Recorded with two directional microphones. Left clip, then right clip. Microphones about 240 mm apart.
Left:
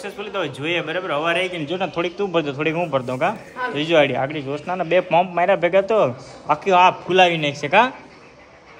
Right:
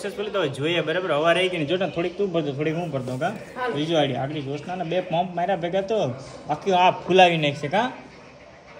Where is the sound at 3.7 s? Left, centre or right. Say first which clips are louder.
Left 7 dB; left.